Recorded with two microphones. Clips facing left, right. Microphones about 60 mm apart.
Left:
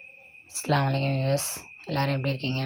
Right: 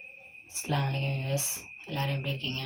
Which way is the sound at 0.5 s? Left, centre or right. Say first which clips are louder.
Left 7 dB; left.